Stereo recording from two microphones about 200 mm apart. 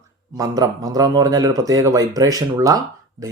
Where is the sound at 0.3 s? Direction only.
20° right (ahead or behind).